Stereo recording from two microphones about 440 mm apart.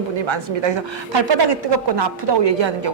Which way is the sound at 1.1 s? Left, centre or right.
Right.